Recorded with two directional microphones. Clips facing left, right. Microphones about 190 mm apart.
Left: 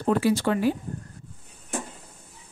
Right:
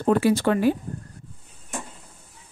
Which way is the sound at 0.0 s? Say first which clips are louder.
Right 3 dB; 55° right (ahead or behind).